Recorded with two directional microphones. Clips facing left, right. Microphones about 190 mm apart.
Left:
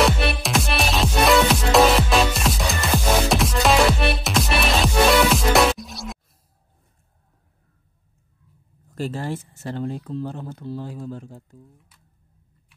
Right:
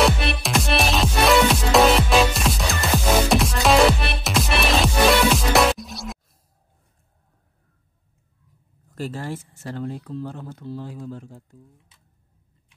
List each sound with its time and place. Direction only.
0.0 s music: centre (ahead or behind)
8.9 s speech: 25° left (ahead or behind)